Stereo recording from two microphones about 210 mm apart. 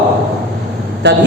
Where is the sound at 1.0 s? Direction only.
55° right (ahead or behind).